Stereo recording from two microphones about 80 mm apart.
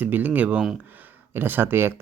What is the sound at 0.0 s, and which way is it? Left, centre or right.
Speech, right.